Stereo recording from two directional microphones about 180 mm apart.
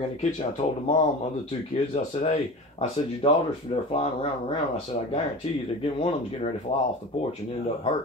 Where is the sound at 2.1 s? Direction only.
40° left (ahead or behind).